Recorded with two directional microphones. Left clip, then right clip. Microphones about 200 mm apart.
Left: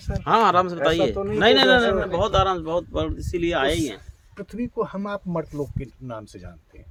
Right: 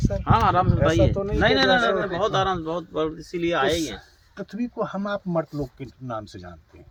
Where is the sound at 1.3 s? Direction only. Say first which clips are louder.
Left 3 dB; 60° left (ahead or behind).